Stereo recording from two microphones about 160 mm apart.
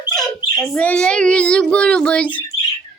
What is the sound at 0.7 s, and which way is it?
Speech, 5° left (ahead or behind).